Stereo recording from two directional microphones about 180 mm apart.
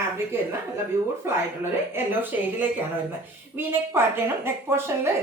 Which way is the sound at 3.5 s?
15° right (ahead or behind).